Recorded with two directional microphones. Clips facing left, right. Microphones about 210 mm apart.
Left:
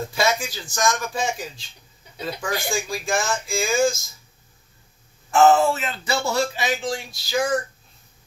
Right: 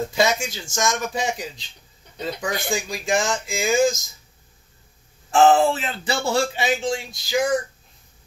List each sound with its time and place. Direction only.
0.1 s speech: 20° right (ahead or behind)
5.3 s speech: 30° right (ahead or behind)